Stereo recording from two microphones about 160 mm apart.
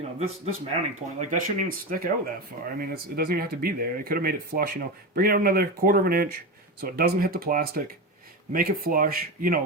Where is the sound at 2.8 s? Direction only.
70° right (ahead or behind).